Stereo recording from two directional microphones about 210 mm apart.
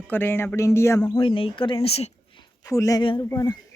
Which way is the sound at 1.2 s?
25° left (ahead or behind).